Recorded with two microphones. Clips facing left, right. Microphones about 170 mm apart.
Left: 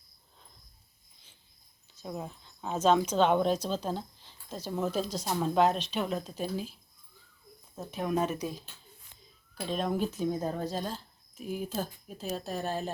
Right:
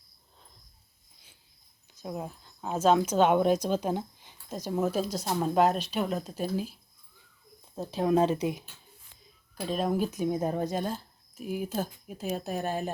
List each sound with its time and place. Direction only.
2.0 s speech: 5° right (ahead or behind)
7.8 s speech: 30° right (ahead or behind)
9.6 s speech: 5° right (ahead or behind)